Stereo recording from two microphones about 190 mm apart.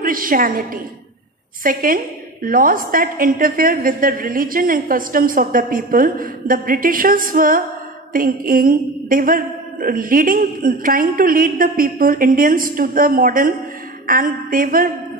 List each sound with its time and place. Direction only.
0.0 s a woman's voice: 50° right (ahead or behind)